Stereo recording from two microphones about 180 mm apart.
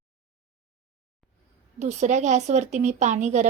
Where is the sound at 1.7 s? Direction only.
40° right (ahead or behind).